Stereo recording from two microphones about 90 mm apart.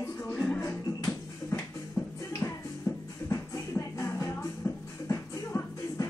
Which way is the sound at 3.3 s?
35° left (ahead or behind).